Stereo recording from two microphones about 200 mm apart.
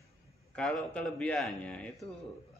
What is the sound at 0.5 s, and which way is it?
A man's voice, 5° left (ahead or behind).